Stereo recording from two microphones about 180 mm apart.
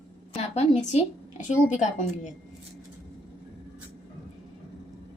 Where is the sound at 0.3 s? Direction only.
35° left (ahead or behind).